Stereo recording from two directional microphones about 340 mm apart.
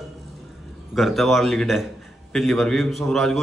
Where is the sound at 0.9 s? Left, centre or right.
Centre.